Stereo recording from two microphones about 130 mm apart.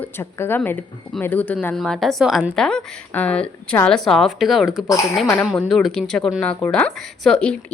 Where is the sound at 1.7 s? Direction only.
Centre (ahead or behind).